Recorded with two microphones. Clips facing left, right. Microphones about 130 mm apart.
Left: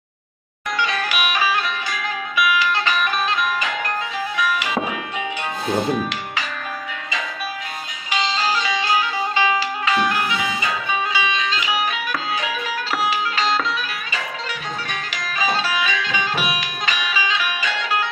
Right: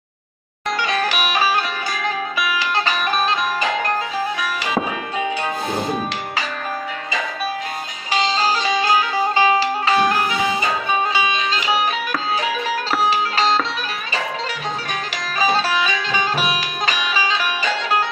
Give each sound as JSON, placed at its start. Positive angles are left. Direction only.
{"t": 0.8, "sound": "music", "side_deg": -35}
{"t": 8.1, "sound": "music", "side_deg": -35}
{"t": 15.1, "sound": "music", "side_deg": -35}